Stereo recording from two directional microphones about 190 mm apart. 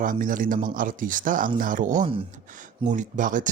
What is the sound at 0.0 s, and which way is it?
Speech, 45° right (ahead or behind).